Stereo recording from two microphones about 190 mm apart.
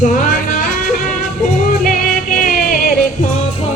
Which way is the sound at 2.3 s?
45° left (ahead or behind).